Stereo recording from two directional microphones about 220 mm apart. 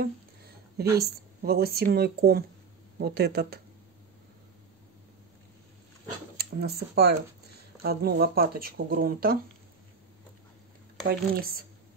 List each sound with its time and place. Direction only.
0.9 s speech: 45° right (ahead or behind)
6.3 s speech: 45° right (ahead or behind)
11.1 s speech: 45° right (ahead or behind)